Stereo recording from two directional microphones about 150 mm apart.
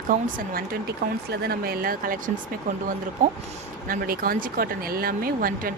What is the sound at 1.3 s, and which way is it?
Speech, 90° right.